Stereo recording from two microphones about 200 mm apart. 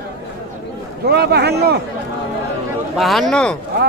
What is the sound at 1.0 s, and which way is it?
Speech, 55° right (ahead or behind).